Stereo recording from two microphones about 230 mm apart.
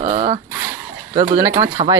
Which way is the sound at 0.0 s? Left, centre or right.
Right.